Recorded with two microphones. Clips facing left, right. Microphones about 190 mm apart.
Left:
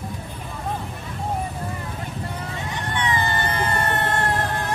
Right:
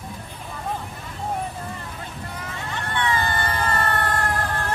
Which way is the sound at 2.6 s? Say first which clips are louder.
Right 1 dB; 15° left (ahead or behind).